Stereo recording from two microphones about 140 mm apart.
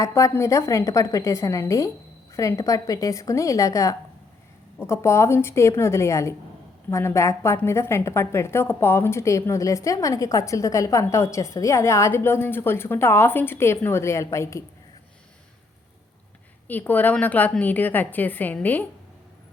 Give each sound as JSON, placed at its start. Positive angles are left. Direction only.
{"t": 0.0, "sound": "a woman's voice", "side_deg": 20}
{"t": 16.6, "sound": "a woman's voice", "side_deg": 15}